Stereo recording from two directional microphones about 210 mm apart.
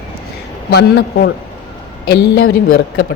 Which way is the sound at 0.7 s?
50° left (ahead or behind).